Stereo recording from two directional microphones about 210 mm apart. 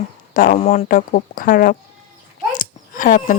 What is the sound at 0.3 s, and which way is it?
Speech, 40° left (ahead or behind).